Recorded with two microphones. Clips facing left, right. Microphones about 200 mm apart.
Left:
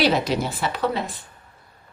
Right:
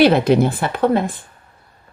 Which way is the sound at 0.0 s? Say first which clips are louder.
Right 8 dB; 55° right (ahead or behind).